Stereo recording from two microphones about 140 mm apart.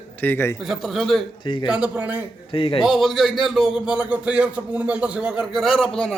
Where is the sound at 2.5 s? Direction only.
40° left (ahead or behind).